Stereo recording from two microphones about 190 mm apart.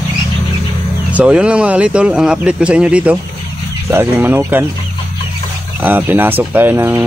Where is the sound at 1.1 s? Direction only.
5° right (ahead or behind).